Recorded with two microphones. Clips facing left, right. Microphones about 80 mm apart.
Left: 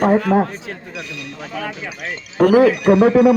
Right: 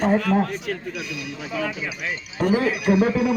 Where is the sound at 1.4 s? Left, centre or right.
Left.